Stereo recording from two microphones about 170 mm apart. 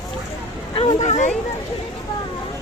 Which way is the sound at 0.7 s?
30° left (ahead or behind).